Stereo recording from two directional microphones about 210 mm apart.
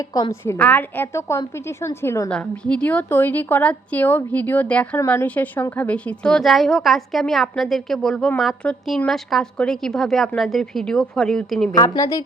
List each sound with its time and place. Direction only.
0.0 s a woman's voice: 20° left (ahead or behind); by 11.7 s centre (ahead or behind)
11.7 s a woman's voice: 15° left (ahead or behind)